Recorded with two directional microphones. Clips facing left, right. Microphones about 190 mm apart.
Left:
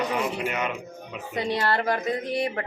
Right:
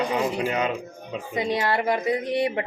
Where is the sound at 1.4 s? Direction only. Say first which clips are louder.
Right 1 dB; 15° right (ahead or behind).